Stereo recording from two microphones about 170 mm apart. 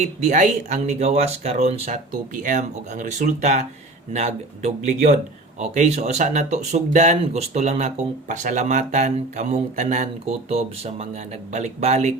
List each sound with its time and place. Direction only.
0.0 s speech: 45° right (ahead or behind)